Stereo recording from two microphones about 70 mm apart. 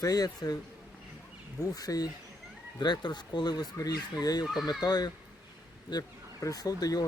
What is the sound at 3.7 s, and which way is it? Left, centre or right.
Speech, left.